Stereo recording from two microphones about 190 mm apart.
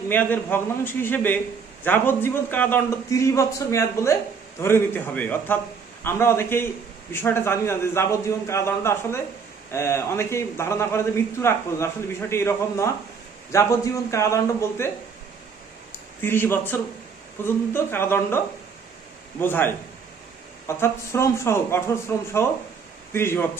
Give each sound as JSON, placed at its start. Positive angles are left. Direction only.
{"t": 0.1, "sound": "a man's voice", "side_deg": 10}